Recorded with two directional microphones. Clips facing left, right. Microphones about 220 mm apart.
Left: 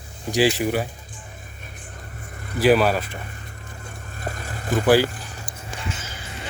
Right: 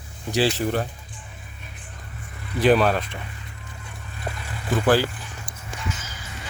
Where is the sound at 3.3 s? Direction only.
45° left (ahead or behind).